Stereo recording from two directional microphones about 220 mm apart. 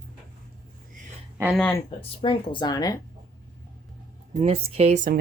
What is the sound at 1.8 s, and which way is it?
Speech, 25° left (ahead or behind).